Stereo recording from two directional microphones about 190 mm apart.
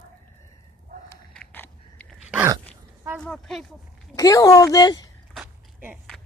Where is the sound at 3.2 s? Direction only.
Centre (ahead or behind).